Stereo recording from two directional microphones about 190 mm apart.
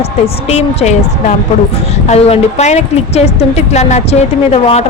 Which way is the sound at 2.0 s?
35° left (ahead or behind).